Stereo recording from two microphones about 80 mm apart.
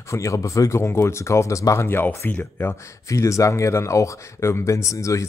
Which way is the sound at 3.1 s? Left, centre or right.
Left.